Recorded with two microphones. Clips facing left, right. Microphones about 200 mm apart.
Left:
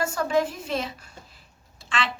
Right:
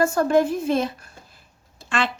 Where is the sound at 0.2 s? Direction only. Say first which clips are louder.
Right 6 dB; 50° right (ahead or behind).